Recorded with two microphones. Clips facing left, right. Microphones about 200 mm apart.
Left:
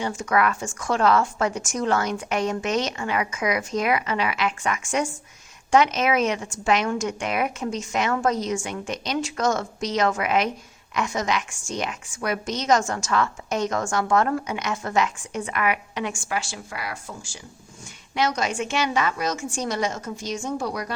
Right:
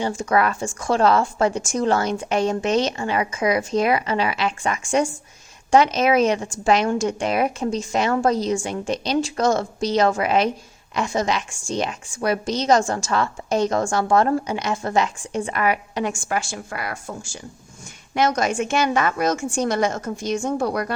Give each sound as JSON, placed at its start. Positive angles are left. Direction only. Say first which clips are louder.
{"t": 0.0, "sound": "a woman's voice", "louder": "right 2 dB", "side_deg": -30}